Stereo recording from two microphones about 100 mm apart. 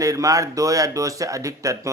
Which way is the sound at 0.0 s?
35° right (ahead or behind).